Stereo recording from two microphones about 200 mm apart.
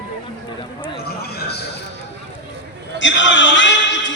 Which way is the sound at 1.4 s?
55° left (ahead or behind).